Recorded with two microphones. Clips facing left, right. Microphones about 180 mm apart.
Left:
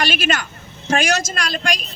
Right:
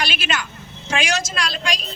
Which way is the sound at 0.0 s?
45° left (ahead or behind).